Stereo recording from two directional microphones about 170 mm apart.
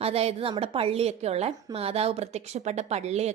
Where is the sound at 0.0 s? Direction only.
35° right (ahead or behind).